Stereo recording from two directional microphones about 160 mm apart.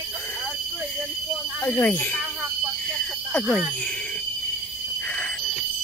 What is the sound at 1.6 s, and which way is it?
Speech, 10° left (ahead or behind).